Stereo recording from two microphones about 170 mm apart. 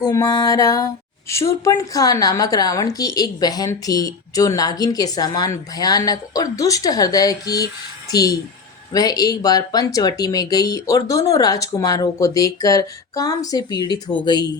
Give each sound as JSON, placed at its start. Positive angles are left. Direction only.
{"t": 0.0, "sound": "a woman's voice", "side_deg": 20}